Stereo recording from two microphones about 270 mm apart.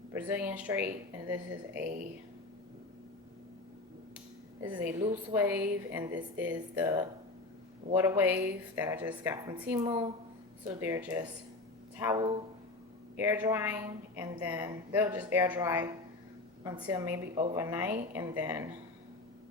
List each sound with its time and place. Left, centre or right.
0.1 s a woman's voice: centre
4.6 s a woman's voice: centre